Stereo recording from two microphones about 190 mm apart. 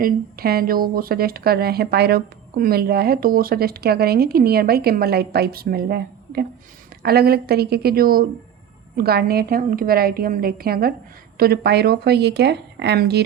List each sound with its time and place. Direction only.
0.0 s a woman's voice: 55° right (ahead or behind)